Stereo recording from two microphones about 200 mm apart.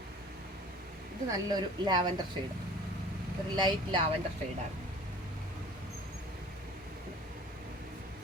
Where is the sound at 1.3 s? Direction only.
20° right (ahead or behind).